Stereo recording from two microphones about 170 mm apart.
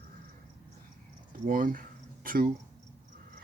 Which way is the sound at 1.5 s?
55° right (ahead or behind).